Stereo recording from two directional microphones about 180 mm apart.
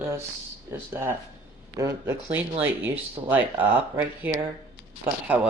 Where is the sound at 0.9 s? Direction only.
15° right (ahead or behind).